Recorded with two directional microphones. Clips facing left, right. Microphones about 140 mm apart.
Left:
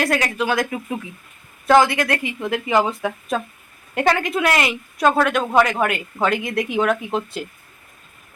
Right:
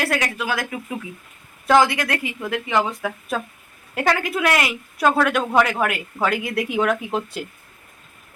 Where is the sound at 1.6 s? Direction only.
15° right (ahead or behind).